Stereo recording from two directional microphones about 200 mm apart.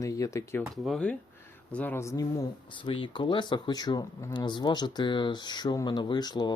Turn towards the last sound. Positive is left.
turn(degrees=20)  # may be behind; listen again after turning